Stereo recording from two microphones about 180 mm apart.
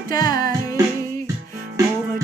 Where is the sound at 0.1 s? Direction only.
20° left (ahead or behind).